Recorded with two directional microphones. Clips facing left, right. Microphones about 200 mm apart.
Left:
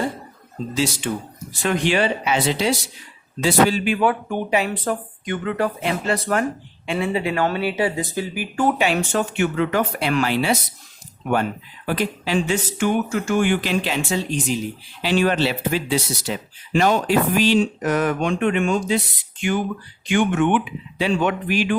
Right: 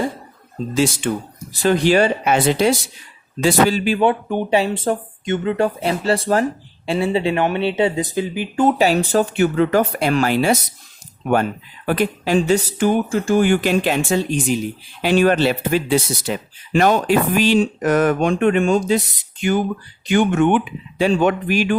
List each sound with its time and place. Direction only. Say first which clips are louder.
1.6 s speech: right 5 dB; 35° right (ahead or behind); by 2.7 s 55° right (ahead or behind)
3.4 s speech: right 2 dB; 40° right (ahead or behind); by 8.7 s 20° right (ahead or behind)
8.8 s speech: right 5 dB; 35° right (ahead or behind)
11.9 s speech: right 4 dB; 50° right (ahead or behind)